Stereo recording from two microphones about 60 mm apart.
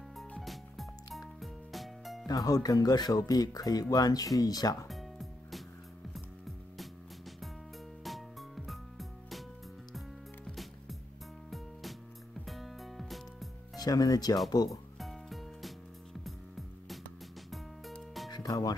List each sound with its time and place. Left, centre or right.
0.4 s music: centre
2.2 s speech: left
4.8 s music: centre
8.0 s music: centre
10.5 s music: centre
12.4 s music: centre
13.7 s speech: left
15.0 s music: centre
18.4 s music: left